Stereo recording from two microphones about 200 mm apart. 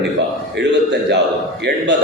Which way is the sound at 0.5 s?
60° right (ahead or behind).